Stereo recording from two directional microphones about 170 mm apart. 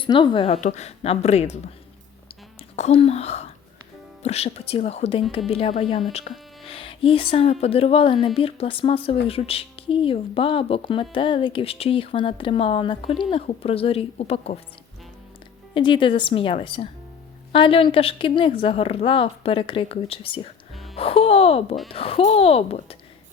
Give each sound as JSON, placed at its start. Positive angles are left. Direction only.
{"t": 0.0, "sound": "speech", "side_deg": 30}
{"t": 2.7, "sound": "speech", "side_deg": 40}
{"t": 15.7, "sound": "speech", "side_deg": 30}